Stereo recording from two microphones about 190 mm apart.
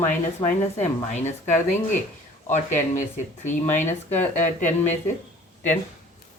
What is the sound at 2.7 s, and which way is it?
Speech, 40° left (ahead or behind).